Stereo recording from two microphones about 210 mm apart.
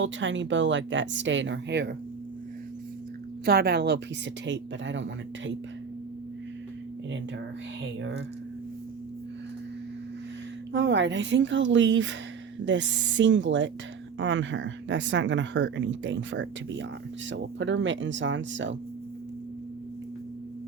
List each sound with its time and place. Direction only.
0.0 s speech: 60° right (ahead or behind)
3.4 s a woman's voice: 50° right (ahead or behind)
10.7 s speech: 60° right (ahead or behind)